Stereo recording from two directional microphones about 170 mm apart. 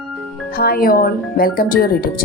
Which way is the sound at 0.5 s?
65° left (ahead or behind).